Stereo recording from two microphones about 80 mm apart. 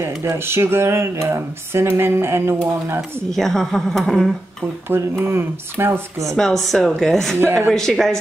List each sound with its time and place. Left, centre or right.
0.0 s speech: right
3.3 s a woman's voice: centre
4.8 s speech: right
6.3 s a woman's voice: centre
7.3 s speech: right
7.7 s speech: centre